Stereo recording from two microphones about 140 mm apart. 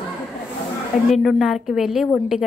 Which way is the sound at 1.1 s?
Centre (ahead or behind).